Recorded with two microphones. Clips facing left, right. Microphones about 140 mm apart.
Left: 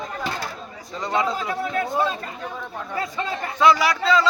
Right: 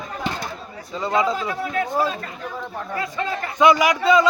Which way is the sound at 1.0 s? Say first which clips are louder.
Right 3 dB; centre (ahead or behind).